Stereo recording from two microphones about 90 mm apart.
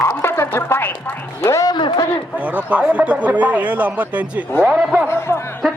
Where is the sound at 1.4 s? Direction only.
35° left (ahead or behind).